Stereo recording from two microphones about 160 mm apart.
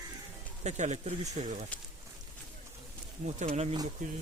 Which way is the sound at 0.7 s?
45° right (ahead or behind).